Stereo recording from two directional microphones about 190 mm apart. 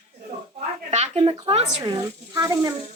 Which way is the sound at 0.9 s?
35° right (ahead or behind).